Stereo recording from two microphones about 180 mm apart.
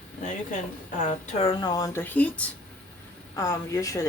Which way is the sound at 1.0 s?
35° left (ahead or behind).